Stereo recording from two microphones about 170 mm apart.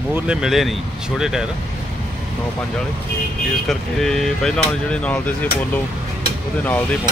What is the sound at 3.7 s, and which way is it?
Speech, centre (ahead or behind).